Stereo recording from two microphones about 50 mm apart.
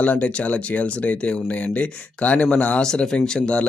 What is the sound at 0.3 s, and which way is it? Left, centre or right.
Speech, left.